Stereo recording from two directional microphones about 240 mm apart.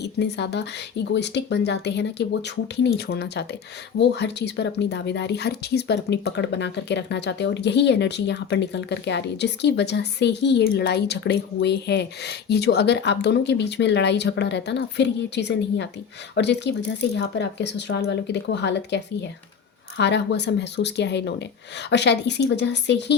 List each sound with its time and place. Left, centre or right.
0.0 s speech: left